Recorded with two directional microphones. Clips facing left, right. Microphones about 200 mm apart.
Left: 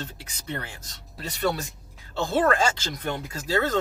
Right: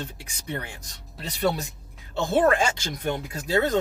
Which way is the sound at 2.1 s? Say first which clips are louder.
Right 2 dB; 20° right (ahead or behind).